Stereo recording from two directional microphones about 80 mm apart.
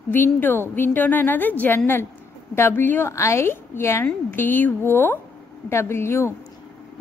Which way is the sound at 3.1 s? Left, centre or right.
Left.